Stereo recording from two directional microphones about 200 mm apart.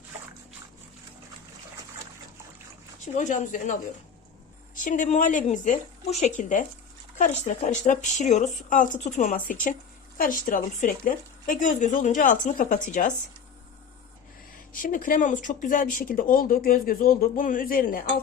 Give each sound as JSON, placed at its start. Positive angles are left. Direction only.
{"t": 3.2, "sound": "speech", "side_deg": 40}
{"t": 14.5, "sound": "speech", "side_deg": 45}